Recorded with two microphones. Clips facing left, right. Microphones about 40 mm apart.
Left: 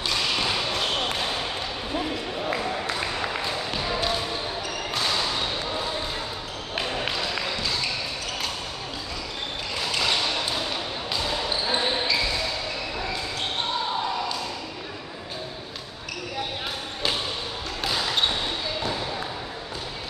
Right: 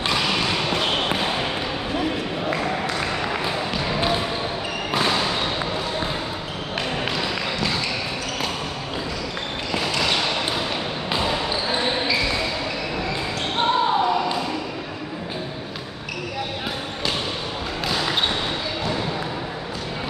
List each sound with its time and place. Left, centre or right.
0.1 s a sound: right
4.0 s basketball bounce: right
11.1 s basketball bounce: right
13.6 s basketball bounce: right